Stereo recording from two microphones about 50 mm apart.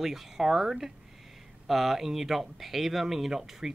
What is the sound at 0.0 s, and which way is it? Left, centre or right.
Speech, centre.